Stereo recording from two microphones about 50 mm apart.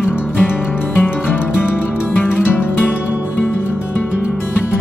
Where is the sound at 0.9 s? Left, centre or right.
Left.